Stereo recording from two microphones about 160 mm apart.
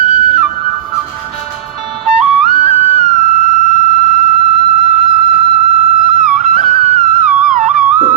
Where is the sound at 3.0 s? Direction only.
55° right (ahead or behind).